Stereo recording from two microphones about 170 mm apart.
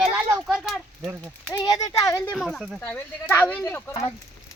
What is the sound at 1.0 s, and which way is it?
Speech, 15° right (ahead or behind).